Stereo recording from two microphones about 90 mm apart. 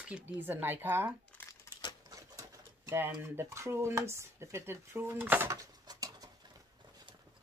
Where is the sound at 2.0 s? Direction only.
40° right (ahead or behind).